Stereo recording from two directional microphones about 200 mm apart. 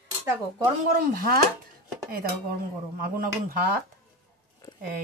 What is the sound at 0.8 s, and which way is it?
Speech, 50° right (ahead or behind).